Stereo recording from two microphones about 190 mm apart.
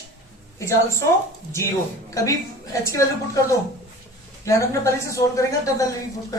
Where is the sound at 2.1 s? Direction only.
15° left (ahead or behind).